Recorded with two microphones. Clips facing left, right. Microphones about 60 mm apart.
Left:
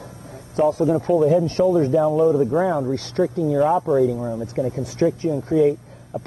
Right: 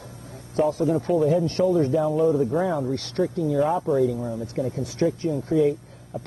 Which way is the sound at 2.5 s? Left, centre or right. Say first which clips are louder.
Left 4 dB; left.